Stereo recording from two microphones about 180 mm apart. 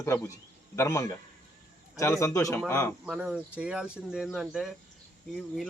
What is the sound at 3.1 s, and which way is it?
Speech, 5° right (ahead or behind).